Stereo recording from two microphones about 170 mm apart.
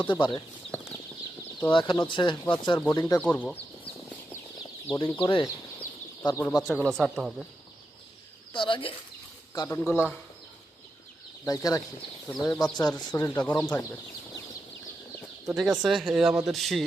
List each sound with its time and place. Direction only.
0.1 s speech: 30° left (ahead or behind)
1.7 s speech: 30° left (ahead or behind)
3.2 s speech: 10° left (ahead or behind)
4.9 s speech: 10° left (ahead or behind)
5.2 s speech: 25° left (ahead or behind)
6.6 s speech: centre (ahead or behind)
8.5 s speech: 30° left (ahead or behind)
9.6 s speech: 15° left (ahead or behind)
11.4 s speech: 20° left (ahead or behind)
12.3 s speech: centre (ahead or behind)
13.1 s speech: 20° left (ahead or behind)
13.4 s speech: 10° left (ahead or behind)
15.4 s speech: centre (ahead or behind)